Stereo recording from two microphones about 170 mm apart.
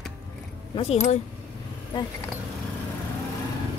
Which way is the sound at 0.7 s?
40° left (ahead or behind).